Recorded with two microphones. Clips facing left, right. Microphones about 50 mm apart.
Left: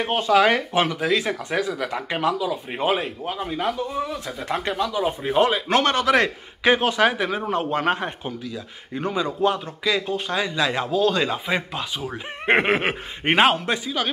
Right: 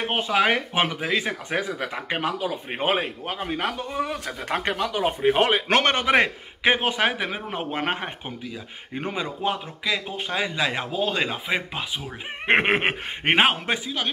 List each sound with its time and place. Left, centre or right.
0.0 s speech: centre
2.3 s speech: right
5.9 s speech: right
9.8 s speech: centre
12.6 s speech: right
13.3 s speech: centre